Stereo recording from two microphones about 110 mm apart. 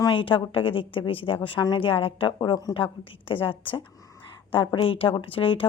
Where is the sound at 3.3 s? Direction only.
55° left (ahead or behind).